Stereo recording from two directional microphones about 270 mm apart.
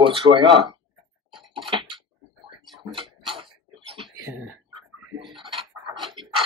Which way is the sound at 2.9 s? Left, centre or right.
Centre.